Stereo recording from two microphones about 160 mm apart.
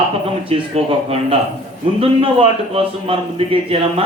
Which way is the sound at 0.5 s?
35° right (ahead or behind).